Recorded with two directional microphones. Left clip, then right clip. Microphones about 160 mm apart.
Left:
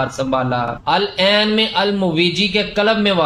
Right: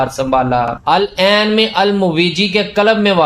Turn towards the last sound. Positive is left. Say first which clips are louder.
# right 4 dB
turn(degrees=-25)  # may be behind; listen again after turning